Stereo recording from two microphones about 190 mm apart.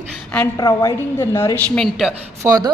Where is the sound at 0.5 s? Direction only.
20° left (ahead or behind).